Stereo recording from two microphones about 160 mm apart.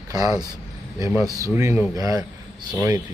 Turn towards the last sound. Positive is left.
turn(degrees=-15)  # may be behind; listen again after turning